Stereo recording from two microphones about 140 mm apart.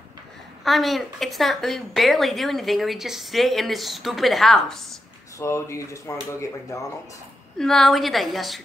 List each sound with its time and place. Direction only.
0.7 s a woman's voice: centre (ahead or behind)
5.4 s speech: 20° left (ahead or behind)
7.5 s a woman's voice: 5° left (ahead or behind)